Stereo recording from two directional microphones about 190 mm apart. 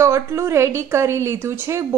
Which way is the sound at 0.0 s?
15° right (ahead or behind).